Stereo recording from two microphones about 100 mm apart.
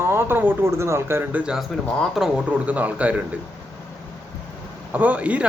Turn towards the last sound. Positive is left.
turn(degrees=-15)  # may be behind; listen again after turning